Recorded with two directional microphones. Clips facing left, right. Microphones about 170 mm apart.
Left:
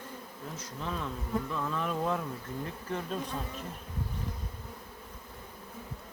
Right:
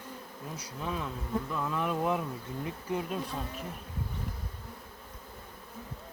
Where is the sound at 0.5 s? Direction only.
10° right (ahead or behind).